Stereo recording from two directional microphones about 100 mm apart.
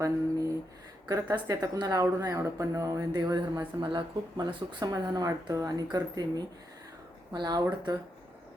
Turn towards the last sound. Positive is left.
turn(degrees=-45)  # may be behind; listen again after turning